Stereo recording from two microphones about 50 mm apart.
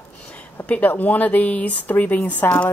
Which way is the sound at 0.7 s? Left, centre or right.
Left.